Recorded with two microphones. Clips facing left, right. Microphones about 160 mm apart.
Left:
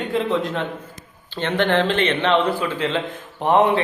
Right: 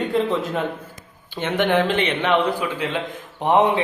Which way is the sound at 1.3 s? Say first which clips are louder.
Even; 15° right (ahead or behind).